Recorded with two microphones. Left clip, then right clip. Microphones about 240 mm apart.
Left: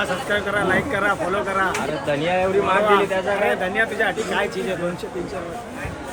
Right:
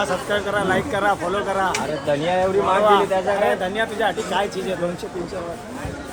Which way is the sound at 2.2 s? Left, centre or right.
Centre.